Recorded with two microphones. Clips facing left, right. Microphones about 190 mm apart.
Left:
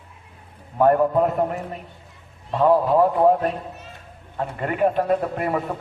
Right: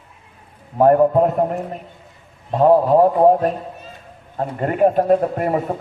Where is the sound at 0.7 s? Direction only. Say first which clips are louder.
Right 4 dB; 40° right (ahead or behind).